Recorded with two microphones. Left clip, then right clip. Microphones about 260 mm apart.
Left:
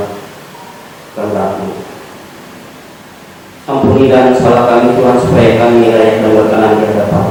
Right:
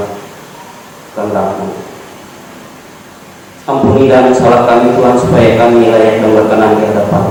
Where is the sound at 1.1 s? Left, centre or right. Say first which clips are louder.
Right 1 dB; centre.